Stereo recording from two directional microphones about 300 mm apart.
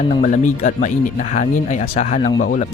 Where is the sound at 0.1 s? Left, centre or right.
Left.